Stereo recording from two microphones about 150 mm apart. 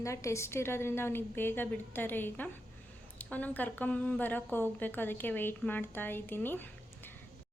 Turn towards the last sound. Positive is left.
turn(degrees=15)  # may be behind; listen again after turning